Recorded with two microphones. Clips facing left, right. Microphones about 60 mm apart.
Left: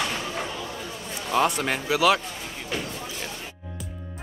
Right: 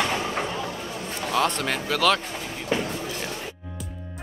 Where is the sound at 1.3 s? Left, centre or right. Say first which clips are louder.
Left 1 dB; centre.